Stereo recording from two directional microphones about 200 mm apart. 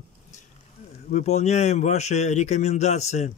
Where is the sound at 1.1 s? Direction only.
35° left (ahead or behind).